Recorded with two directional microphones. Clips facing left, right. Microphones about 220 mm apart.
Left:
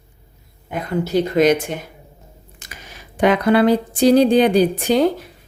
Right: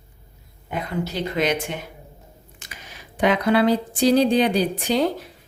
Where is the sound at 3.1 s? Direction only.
50° left (ahead or behind).